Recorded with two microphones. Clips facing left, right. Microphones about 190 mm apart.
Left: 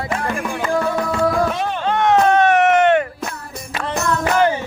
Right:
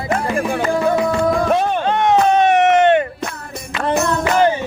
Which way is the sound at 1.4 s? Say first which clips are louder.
Right 5 dB; 55° right (ahead or behind).